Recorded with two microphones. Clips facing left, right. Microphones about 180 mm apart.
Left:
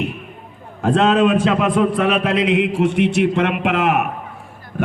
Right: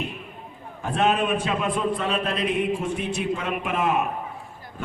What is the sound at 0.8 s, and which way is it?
A man's voice, 90° left.